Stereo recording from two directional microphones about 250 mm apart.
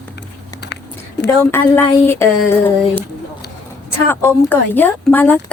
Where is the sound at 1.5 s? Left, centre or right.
Centre.